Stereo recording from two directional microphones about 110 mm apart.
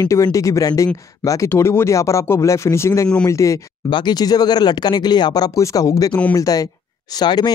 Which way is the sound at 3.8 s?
45° left (ahead or behind).